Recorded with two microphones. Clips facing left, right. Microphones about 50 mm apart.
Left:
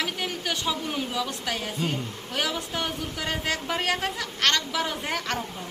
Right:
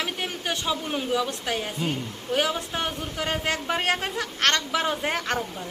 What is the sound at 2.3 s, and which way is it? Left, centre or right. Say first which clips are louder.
Speech: right 4 dB; right.